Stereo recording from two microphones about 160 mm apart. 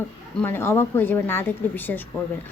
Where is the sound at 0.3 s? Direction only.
15° left (ahead or behind).